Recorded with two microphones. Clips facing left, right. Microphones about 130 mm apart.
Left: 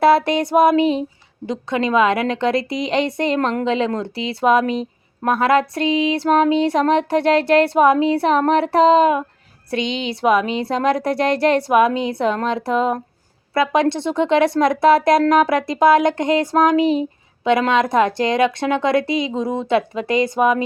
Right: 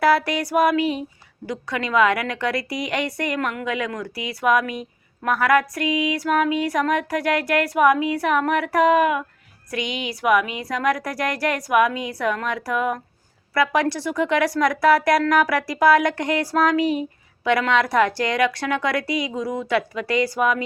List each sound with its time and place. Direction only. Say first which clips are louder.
0.0 s a woman's voice: left 5 dB; 25° left (ahead or behind)